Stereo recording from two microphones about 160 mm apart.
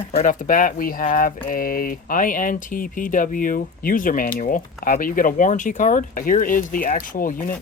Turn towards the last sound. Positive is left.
turn(degrees=60)  # may be behind; listen again after turning